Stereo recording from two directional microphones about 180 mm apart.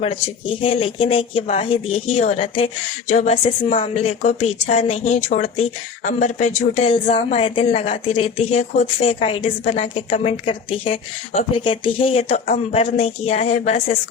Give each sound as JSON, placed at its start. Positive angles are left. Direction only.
{"t": 0.0, "sound": "a woman's voice", "side_deg": 30}